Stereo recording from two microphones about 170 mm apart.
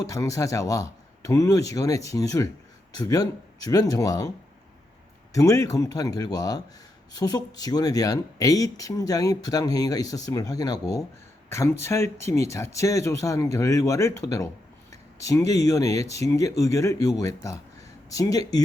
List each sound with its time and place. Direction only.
0.0 s speech: 20° left (ahead or behind)
5.3 s speech: 20° left (ahead or behind)